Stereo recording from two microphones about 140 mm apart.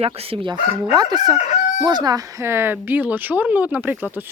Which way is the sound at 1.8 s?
30° right (ahead or behind).